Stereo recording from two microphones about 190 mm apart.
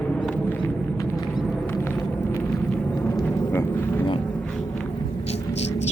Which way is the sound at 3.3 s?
10° left (ahead or behind).